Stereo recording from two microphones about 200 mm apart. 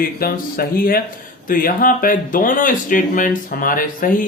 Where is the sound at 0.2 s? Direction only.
45° left (ahead or behind).